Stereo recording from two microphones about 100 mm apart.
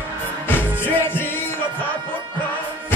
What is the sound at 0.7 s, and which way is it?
Music, 20° left (ahead or behind).